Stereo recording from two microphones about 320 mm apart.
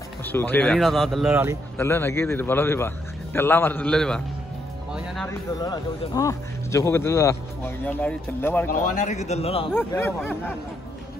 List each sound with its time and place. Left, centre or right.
0.2 s speech: centre
1.8 s speech: centre
5.6 s speech: centre
8.6 s a man's voice: left
9.7 s speech: centre